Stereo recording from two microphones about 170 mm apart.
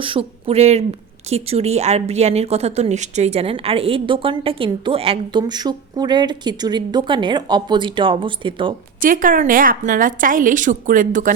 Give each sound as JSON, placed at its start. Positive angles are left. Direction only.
{"t": 0.0, "sound": "speech", "side_deg": -30}
{"t": 9.0, "sound": "a woman's voice", "side_deg": -55}